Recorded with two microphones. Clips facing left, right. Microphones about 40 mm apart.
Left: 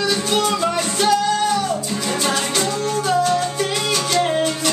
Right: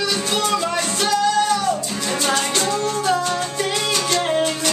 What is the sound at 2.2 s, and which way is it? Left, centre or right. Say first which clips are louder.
Music: right 1 dB; centre.